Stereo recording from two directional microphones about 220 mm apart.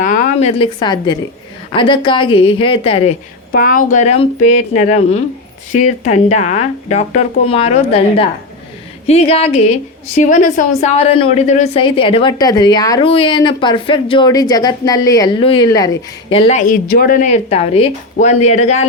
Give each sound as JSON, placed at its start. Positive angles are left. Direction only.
{"t": 0.0, "sound": "a woman's voice", "side_deg": 35}
{"t": 3.5, "sound": "a woman's voice", "side_deg": 40}